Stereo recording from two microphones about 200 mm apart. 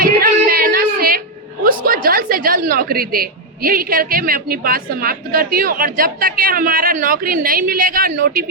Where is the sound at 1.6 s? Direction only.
45° right (ahead or behind).